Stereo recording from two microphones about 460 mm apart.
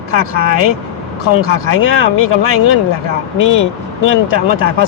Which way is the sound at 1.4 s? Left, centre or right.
Left.